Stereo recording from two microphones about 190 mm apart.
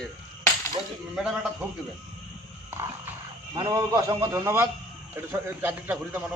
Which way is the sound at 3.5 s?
15° right (ahead or behind).